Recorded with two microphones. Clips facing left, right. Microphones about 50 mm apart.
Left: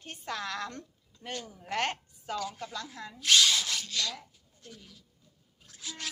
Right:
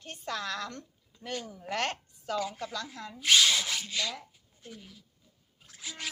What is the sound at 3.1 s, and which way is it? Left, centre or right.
Speech, centre.